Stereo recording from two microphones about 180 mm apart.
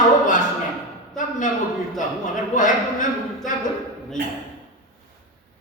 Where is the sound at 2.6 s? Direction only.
45° left (ahead or behind).